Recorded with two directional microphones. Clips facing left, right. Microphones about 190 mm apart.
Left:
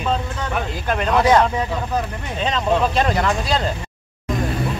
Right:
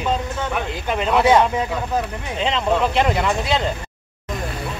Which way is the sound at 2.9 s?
20° right (ahead or behind).